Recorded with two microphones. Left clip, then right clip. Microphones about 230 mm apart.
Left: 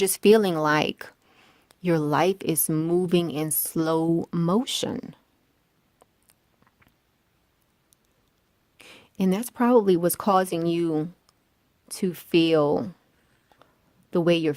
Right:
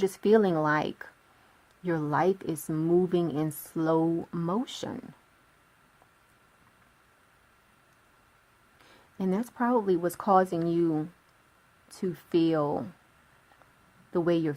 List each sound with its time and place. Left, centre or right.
0.0 s a woman's voice: left
8.8 s a woman's voice: left
14.1 s a woman's voice: left